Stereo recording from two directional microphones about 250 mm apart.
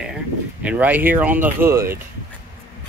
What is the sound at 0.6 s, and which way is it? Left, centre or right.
Speech, centre.